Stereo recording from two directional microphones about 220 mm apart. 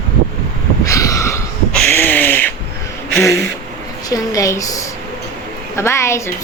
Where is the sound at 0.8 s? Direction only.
15° left (ahead or behind).